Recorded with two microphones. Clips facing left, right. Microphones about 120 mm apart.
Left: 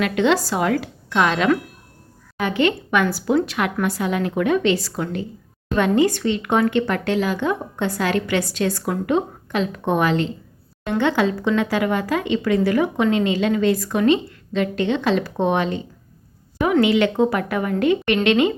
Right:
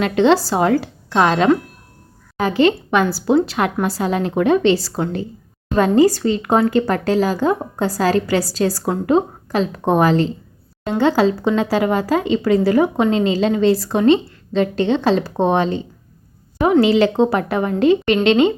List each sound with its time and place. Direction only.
0.0 s speech: 30° right (ahead or behind)
16.8 s a woman's voice: 30° right (ahead or behind)